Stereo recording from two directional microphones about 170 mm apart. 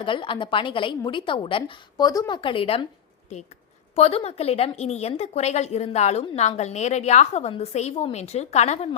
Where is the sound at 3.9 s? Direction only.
35° left (ahead or behind).